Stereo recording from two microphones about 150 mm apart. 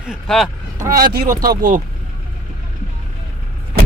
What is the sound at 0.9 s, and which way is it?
Speech, 75° right (ahead or behind).